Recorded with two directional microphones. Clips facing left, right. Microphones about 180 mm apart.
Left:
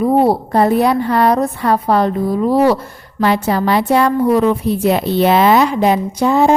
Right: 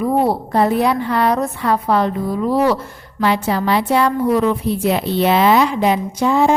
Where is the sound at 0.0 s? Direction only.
35° left (ahead or behind).